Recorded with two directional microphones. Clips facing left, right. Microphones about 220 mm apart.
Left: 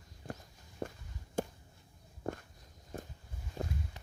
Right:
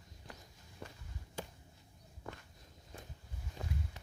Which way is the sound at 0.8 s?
50° left (ahead or behind).